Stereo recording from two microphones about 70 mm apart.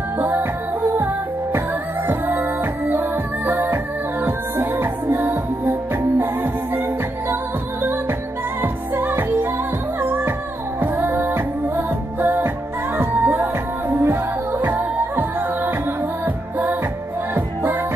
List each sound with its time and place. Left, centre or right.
0.2 s music: right
7.8 s music: right
17.3 s music: right